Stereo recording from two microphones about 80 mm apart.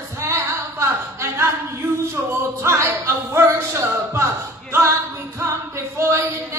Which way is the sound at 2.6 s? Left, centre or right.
Right.